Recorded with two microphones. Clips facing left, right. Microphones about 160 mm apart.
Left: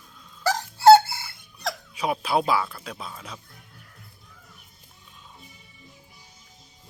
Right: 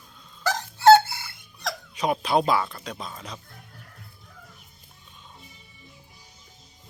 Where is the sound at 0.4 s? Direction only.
35° left (ahead or behind).